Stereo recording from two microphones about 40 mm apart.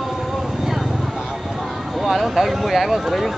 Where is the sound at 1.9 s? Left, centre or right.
Centre.